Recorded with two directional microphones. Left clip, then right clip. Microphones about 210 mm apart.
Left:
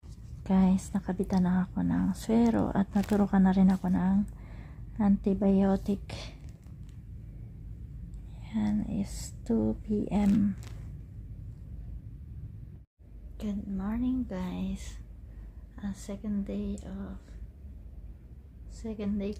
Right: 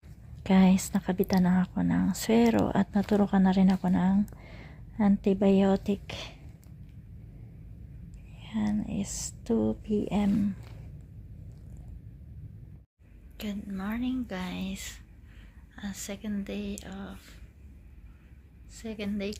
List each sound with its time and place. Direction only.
0.4 s a woman's voice: 15° right (ahead or behind)
8.4 s speech: 10° right (ahead or behind)
13.3 s speech: 10° left (ahead or behind)
18.8 s speech: 10° left (ahead or behind)